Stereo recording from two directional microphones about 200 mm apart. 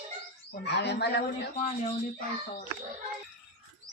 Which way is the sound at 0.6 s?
60° left (ahead or behind).